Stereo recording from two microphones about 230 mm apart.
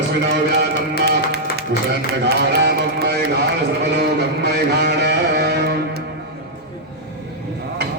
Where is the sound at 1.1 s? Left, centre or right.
Right.